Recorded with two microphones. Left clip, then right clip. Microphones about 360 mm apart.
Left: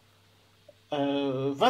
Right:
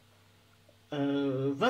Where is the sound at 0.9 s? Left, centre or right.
Centre.